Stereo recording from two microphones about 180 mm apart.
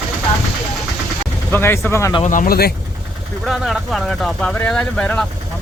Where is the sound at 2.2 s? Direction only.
50° left (ahead or behind).